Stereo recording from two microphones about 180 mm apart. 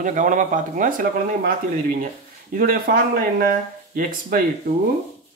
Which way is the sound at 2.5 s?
55° right (ahead or behind).